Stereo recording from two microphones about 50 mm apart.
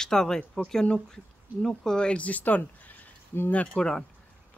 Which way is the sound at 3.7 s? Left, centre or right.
Centre.